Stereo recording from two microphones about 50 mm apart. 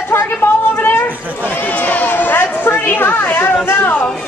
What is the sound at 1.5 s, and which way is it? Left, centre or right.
A woman's voice, left.